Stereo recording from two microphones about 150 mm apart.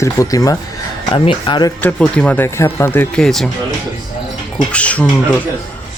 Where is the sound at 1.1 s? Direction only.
35° left (ahead or behind).